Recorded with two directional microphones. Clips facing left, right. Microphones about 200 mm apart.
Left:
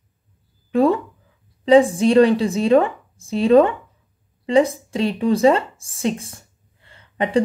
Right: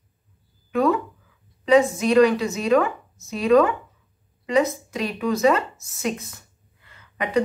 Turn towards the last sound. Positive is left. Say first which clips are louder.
# left 3 dB
turn(degrees=30)  # may be behind; listen again after turning